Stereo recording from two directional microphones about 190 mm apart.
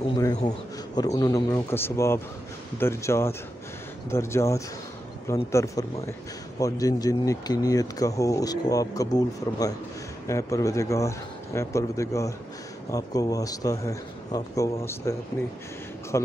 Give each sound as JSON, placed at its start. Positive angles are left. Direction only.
{"t": 0.9, "sound": "speech", "side_deg": 20}